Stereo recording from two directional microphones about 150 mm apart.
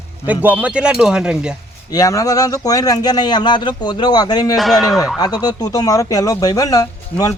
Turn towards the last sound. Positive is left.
turn(degrees=25)  # may be behind; listen again after turning